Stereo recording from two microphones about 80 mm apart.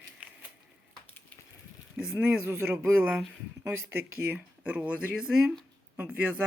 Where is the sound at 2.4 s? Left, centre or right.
Right.